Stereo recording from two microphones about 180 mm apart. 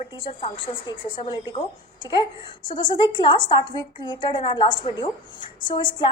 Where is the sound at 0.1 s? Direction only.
30° left (ahead or behind).